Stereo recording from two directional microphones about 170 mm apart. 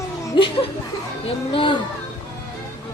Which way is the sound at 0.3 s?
30° left (ahead or behind).